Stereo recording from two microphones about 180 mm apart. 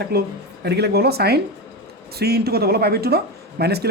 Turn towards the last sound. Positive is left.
turn(degrees=-65)  # may be behind; listen again after turning